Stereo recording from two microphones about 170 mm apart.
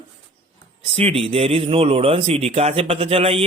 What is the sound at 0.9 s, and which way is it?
Speech, 35° right (ahead or behind).